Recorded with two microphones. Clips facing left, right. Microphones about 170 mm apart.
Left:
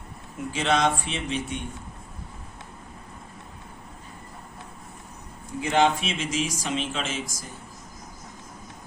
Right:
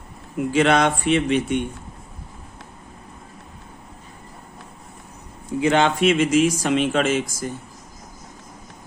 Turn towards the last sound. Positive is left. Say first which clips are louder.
# right 11 dB
turn(degrees=-60)  # may be behind; listen again after turning